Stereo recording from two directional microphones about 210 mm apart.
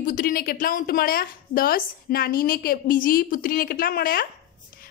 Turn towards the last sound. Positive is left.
turn(degrees=45)  # may be behind; listen again after turning